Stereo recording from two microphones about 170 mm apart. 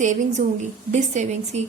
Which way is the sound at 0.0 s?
45° right (ahead or behind).